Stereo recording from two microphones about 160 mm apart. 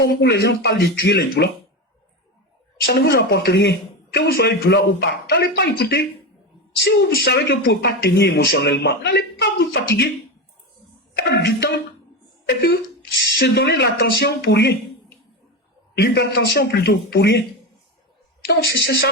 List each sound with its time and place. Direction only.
0.0 s speech: 90° left
2.8 s speech: 75° left (ahead or behind)
11.3 s speech: 90° left
13.4 s speech: 90° left
16.0 s speech: 85° left
18.4 s speech: 85° left